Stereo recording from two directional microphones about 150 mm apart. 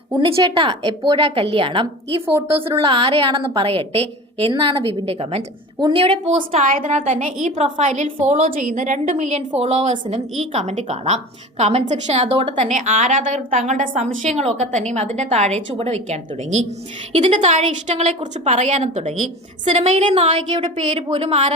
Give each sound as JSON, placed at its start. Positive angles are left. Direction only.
{"t": 0.1, "sound": "a woman's voice", "side_deg": -35}
{"t": 6.7, "sound": "a woman's voice", "side_deg": -60}
{"t": 20.1, "sound": "a woman's voice", "side_deg": -40}